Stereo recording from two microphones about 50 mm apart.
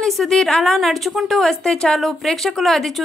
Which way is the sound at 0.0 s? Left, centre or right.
Centre.